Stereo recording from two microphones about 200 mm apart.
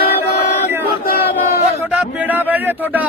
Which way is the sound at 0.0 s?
50° left (ahead or behind).